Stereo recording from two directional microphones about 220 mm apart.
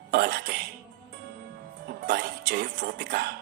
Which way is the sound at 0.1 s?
45° right (ahead or behind).